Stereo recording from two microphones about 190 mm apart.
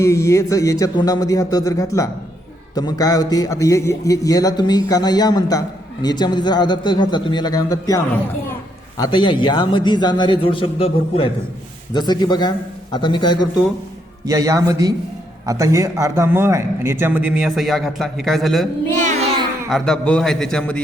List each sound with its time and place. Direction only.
0.0 s a man's voice: 15° left (ahead or behind)
14.3 s a man's voice: 15° right (ahead or behind); by 18.7 s centre (ahead or behind)
19.7 s a man's voice: 5° left (ahead or behind)